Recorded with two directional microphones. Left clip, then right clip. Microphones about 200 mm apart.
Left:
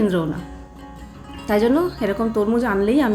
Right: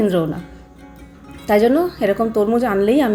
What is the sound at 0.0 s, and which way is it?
Speech, 5° right (ahead or behind).